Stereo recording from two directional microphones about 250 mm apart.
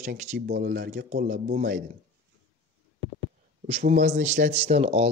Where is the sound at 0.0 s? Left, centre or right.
Right.